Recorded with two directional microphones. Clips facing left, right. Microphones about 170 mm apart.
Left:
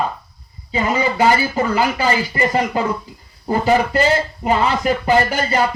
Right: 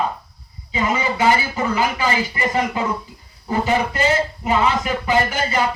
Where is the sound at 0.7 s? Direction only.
35° left (ahead or behind).